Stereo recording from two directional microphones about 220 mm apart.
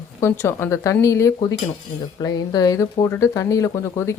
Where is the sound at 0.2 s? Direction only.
10° left (ahead or behind).